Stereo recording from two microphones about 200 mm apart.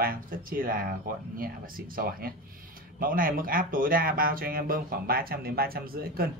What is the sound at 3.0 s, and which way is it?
Speech, 45° right (ahead or behind).